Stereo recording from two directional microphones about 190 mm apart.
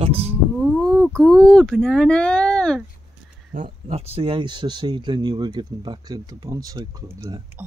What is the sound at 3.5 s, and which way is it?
Speech, 45° right (ahead or behind).